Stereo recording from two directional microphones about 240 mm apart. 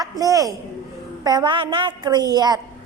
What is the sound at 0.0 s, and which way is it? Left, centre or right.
A man's voice, centre.